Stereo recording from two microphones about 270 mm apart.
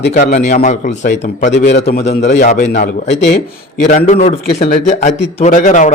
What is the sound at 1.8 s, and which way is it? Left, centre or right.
A man's voice, left.